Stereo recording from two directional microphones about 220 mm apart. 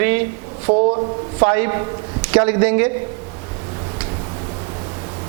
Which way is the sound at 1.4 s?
20° right (ahead or behind).